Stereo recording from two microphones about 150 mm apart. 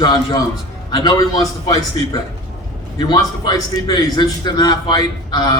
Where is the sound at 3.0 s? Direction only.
30° left (ahead or behind).